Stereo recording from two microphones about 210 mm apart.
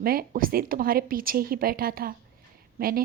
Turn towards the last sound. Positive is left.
turn(degrees=-45)  # may be behind; listen again after turning